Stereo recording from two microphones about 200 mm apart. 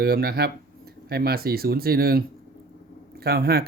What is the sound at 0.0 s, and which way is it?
Speech, 50° right (ahead or behind).